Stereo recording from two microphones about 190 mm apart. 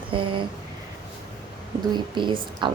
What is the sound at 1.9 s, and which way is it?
Speech, 25° right (ahead or behind).